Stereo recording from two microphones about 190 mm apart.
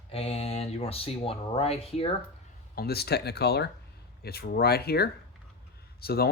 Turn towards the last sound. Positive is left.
turn(degrees=55)  # may be behind; listen again after turning